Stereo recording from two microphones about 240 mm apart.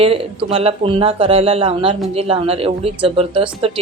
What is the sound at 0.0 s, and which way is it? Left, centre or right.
Speech, right.